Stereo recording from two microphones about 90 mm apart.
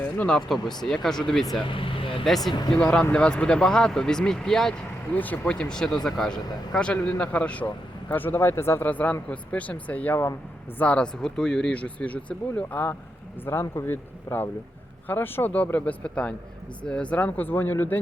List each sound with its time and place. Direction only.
0.0 s speech: 20° left (ahead or behind)
0.3 s speech: centre (ahead or behind)
1.6 s speech: 75° left (ahead or behind)
2.2 s speech: centre (ahead or behind)
5.1 s speech: 20° left (ahead or behind)